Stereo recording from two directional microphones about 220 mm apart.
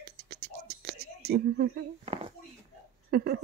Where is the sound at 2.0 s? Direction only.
25° right (ahead or behind).